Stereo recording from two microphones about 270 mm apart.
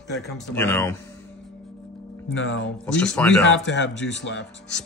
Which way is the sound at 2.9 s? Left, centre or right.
Centre.